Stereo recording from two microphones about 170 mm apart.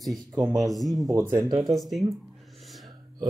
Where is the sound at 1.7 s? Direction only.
Centre (ahead or behind).